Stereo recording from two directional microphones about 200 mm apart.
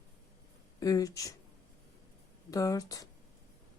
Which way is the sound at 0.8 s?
15° left (ahead or behind).